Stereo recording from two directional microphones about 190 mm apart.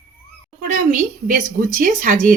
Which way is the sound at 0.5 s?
40° right (ahead or behind).